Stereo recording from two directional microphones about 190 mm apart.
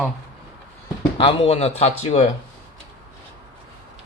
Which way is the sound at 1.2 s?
25° left (ahead or behind).